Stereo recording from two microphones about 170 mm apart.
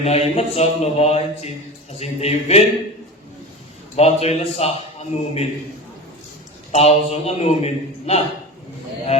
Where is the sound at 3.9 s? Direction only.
40° left (ahead or behind).